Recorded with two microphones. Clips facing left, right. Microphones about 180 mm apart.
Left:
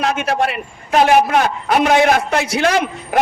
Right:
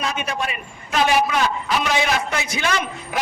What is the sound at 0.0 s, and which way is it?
A man's voice, 65° left (ahead or behind).